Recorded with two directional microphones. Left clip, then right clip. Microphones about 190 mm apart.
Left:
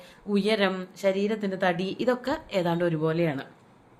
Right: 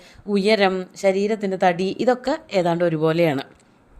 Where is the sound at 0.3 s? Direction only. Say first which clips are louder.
Right 7 dB; 35° right (ahead or behind).